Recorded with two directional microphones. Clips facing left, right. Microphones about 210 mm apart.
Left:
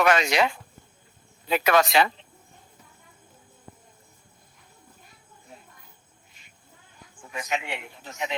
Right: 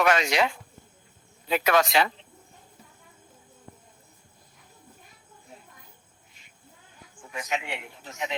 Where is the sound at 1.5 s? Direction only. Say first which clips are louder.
Left 1 dB; 65° left (ahead or behind).